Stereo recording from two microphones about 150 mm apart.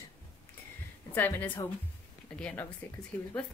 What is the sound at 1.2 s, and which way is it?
Speech, 10° left (ahead or behind).